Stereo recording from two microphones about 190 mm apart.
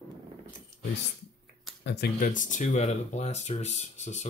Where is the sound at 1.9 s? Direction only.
55° left (ahead or behind).